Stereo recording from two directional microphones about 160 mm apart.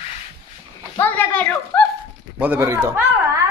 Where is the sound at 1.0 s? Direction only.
10° left (ahead or behind).